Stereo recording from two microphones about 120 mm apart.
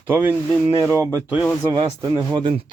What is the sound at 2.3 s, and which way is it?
Speech, 45° right (ahead or behind).